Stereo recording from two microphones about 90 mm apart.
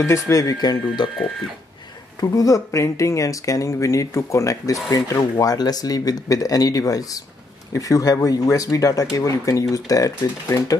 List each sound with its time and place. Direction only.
0.0 s speech: 35° left (ahead or behind)
2.1 s speech: 40° left (ahead or behind)